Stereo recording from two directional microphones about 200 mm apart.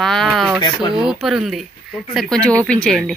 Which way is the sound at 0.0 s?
Centre (ahead or behind).